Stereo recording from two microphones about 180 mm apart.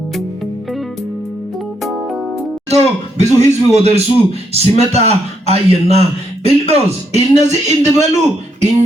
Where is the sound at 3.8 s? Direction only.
35° right (ahead or behind).